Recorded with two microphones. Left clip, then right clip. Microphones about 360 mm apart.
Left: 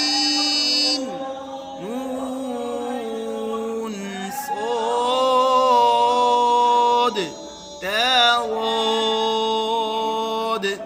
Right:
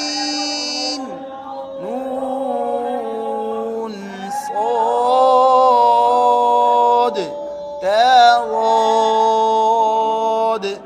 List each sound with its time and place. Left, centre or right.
0.0 s music: centre
4.7 s a sound: centre
7.9 s mantra: centre